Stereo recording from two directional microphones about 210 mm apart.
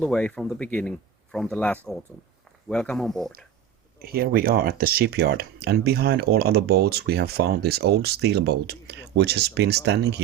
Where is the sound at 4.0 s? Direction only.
45° right (ahead or behind).